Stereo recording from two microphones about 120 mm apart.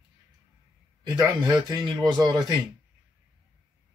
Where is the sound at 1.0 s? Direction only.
30° right (ahead or behind).